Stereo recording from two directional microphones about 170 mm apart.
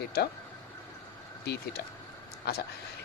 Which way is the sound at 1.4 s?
70° left (ahead or behind).